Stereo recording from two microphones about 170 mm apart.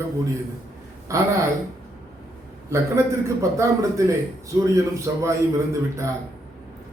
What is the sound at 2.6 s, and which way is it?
A man's voice, 15° right (ahead or behind).